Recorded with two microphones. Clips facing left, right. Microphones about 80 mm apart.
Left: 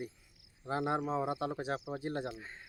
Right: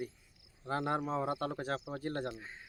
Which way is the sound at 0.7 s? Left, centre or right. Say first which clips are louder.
Left 1 dB; centre.